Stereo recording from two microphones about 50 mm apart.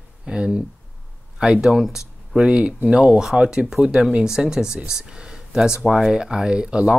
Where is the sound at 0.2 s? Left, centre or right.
Centre.